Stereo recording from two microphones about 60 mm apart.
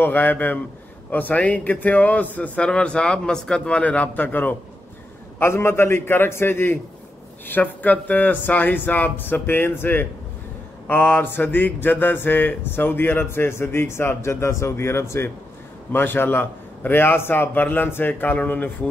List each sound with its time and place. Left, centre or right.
0.0 s a man's voice: left
5.4 s speech: left
15.9 s speech: left